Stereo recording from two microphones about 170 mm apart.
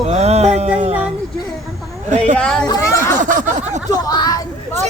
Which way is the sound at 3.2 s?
50° right (ahead or behind).